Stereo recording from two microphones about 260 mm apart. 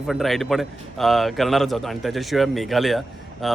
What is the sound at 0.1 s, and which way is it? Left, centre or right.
A man's voice, centre.